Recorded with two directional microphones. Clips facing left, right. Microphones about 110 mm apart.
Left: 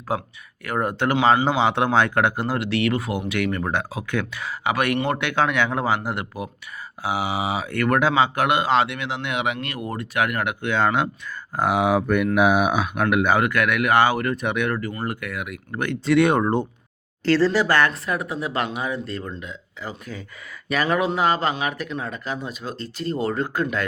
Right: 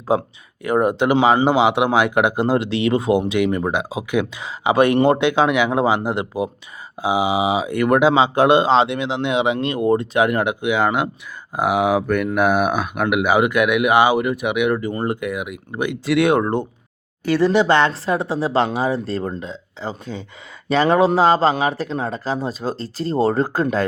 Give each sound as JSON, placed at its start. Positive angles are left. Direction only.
{"t": 0.1, "sound": "speech", "side_deg": -20}
{"t": 17.2, "sound": "speech", "side_deg": -15}